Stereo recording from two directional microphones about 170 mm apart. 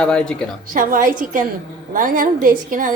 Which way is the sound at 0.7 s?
55° right (ahead or behind).